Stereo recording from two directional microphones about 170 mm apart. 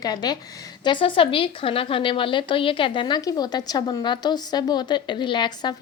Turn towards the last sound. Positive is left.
turn(degrees=25)  # may be behind; listen again after turning